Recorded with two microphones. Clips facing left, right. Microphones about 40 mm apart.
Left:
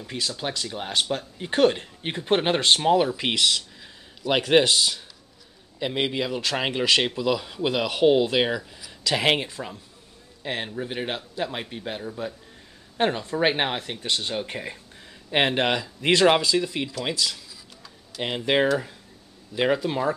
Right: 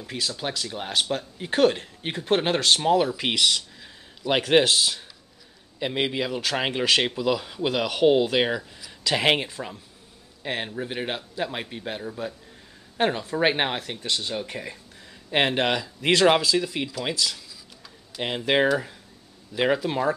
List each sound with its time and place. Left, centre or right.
0.0 s speech: centre
14.0 s speech: centre
15.3 s speech: centre
17.8 s typing: centre
19.5 s speech: centre